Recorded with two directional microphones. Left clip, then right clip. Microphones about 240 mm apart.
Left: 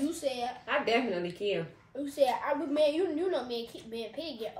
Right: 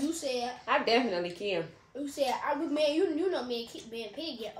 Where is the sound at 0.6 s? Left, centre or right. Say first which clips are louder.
Right 2 dB; centre.